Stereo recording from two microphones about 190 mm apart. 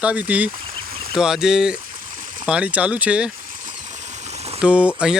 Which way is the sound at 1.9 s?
45° right (ahead or behind).